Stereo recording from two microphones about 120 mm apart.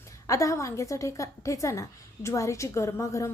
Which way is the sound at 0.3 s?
25° left (ahead or behind).